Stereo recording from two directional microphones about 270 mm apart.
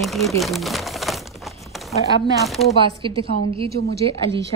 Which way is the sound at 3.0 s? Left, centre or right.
Centre.